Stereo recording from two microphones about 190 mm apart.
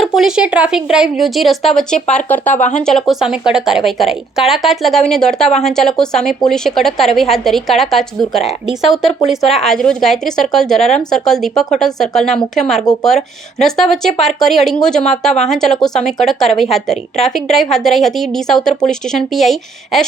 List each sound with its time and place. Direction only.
0.2 s speech: 5° right (ahead or behind)
2.6 s speech: 40° left (ahead or behind)
2.8 s speech: centre (ahead or behind)